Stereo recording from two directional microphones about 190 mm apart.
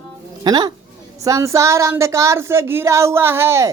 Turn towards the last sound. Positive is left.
turn(degrees=-15)  # may be behind; listen again after turning